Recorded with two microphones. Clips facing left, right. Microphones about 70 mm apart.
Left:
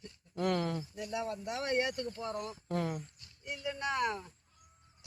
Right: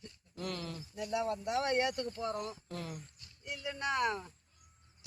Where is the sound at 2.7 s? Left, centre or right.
Left.